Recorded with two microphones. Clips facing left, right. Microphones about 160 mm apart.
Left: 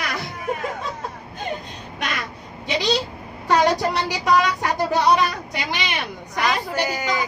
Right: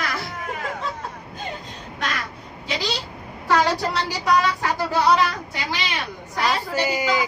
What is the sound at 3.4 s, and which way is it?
Speech, 20° left (ahead or behind).